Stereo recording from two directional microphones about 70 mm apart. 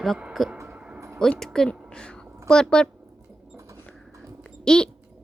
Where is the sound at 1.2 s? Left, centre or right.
Centre.